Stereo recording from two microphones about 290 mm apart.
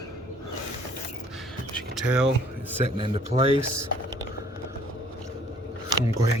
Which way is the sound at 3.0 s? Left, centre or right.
Centre.